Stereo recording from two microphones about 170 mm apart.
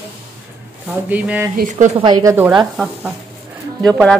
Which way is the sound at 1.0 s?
10° right (ahead or behind).